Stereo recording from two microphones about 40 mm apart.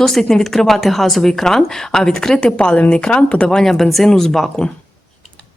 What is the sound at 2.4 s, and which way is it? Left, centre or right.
Speech, left.